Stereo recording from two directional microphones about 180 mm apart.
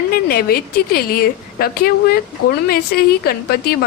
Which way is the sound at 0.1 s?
55° left (ahead or behind).